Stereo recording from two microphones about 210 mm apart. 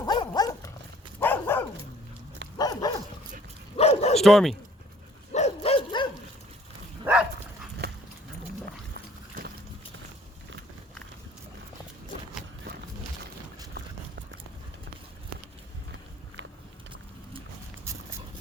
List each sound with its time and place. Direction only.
0.0 s dog: 20° left (ahead or behind)
3.8 s bow-wow: 30° left (ahead or behind)
4.2 s speech: centre (ahead or behind)
5.3 s dog: 30° left (ahead or behind)
7.0 s dog: 5° right (ahead or behind)